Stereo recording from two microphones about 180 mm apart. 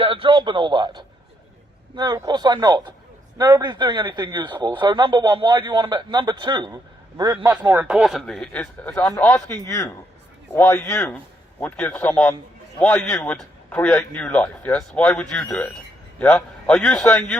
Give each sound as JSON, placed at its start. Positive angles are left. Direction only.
{"t": 0.0, "sound": "a man's voice", "side_deg": -30}
{"t": 7.4, "sound": "a man's voice", "side_deg": -15}